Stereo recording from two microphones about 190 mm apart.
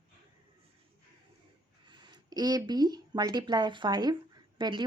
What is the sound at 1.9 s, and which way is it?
Speech, 20° right (ahead or behind).